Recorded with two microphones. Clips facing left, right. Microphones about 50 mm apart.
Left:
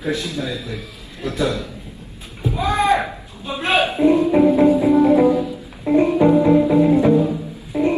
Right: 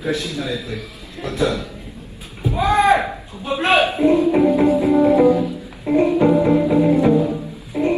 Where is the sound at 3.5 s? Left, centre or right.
Right.